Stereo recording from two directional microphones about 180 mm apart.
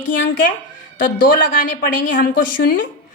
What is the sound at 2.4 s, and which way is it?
Speech, 90° left.